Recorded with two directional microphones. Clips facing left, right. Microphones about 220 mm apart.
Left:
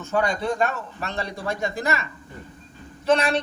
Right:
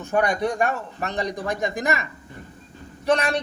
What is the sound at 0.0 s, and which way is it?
A man's voice, 15° right (ahead or behind).